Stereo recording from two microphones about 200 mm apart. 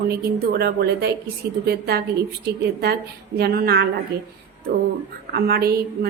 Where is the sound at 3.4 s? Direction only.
50° right (ahead or behind).